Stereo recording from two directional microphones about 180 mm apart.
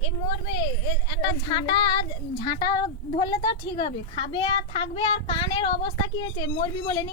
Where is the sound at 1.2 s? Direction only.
25° left (ahead or behind).